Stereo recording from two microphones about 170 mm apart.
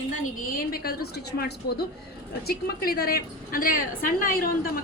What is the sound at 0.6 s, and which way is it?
A woman's voice, 60° left (ahead or behind).